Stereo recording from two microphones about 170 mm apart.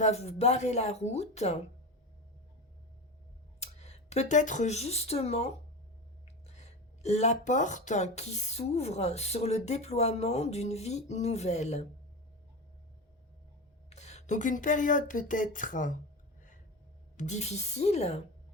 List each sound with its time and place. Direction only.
0.0 s speech: 40° left (ahead or behind)
3.6 s speech: 40° left (ahead or behind)
6.5 s speech: 40° left (ahead or behind)
13.9 s speech: 40° left (ahead or behind)
17.2 s speech: 45° left (ahead or behind)